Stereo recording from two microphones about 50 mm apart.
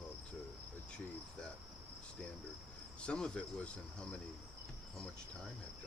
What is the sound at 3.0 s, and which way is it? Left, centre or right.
Speech, left.